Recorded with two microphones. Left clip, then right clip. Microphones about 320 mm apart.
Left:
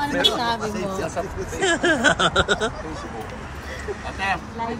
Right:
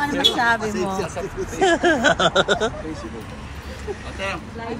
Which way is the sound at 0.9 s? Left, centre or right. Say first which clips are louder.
Even; left.